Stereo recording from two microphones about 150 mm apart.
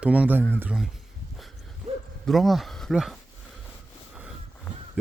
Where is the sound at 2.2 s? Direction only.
Centre (ahead or behind).